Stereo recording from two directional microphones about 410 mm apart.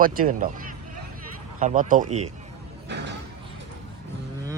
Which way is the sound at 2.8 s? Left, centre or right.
Right.